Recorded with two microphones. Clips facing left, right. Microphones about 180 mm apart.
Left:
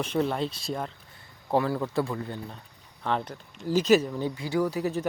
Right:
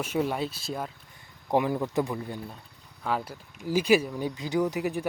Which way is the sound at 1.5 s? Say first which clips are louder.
Even; 15° right (ahead or behind).